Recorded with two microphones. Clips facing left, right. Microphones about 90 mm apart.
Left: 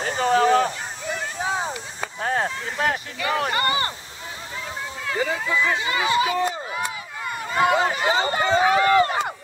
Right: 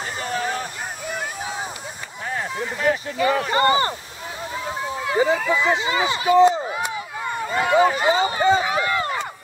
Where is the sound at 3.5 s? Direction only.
25° right (ahead or behind).